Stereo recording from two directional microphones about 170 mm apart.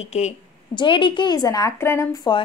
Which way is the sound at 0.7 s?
30° left (ahead or behind).